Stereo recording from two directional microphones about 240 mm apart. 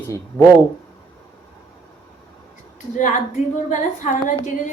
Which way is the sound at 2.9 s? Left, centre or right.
Left.